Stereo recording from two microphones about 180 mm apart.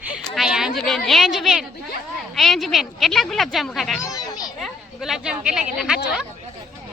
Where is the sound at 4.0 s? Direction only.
20° left (ahead or behind).